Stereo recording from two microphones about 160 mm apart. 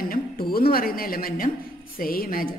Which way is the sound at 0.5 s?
70° left (ahead or behind).